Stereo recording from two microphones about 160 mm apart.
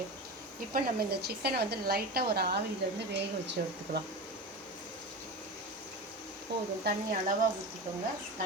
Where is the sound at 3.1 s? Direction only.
90° right.